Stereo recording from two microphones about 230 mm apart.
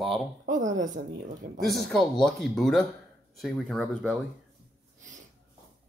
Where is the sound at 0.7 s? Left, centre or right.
Right.